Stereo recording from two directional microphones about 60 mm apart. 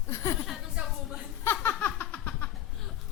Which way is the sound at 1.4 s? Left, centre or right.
Left.